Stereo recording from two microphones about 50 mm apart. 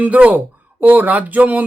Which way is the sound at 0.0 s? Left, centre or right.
Right.